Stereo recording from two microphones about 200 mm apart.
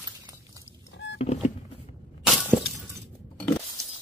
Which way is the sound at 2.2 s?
5° right (ahead or behind).